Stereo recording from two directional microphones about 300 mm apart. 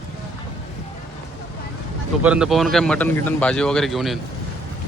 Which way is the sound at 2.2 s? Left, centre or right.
Centre.